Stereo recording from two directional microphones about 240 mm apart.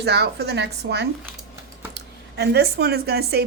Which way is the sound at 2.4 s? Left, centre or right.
Right.